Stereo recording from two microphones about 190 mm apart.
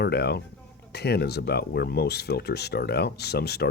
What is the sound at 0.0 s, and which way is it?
Speech, 60° left (ahead or behind).